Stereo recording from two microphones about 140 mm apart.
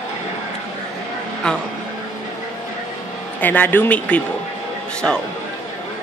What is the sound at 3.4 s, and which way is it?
Speech, 15° left (ahead or behind).